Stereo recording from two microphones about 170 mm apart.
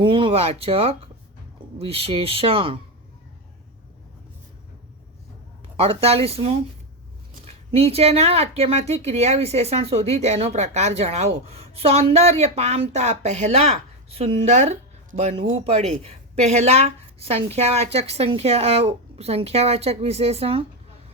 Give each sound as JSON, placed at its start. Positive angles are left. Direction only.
{"t": 0.0, "sound": "speech", "side_deg": -30}
{"t": 5.7, "sound": "speech", "side_deg": -35}